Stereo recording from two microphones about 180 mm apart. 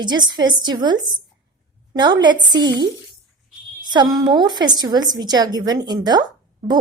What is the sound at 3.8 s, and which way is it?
A woman's voice, 25° right (ahead or behind).